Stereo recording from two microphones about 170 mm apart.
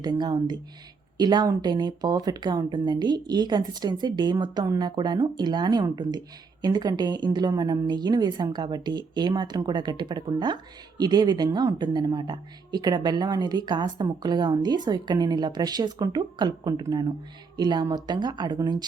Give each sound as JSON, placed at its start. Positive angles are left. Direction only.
{"t": 0.0, "sound": "a woman's voice", "side_deg": -25}